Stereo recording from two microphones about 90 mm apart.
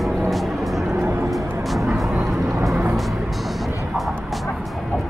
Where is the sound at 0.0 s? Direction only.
Centre (ahead or behind).